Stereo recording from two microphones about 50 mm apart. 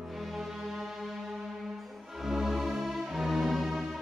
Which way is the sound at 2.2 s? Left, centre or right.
Centre.